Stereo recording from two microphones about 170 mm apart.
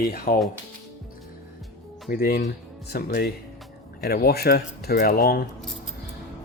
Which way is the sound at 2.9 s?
65° left (ahead or behind).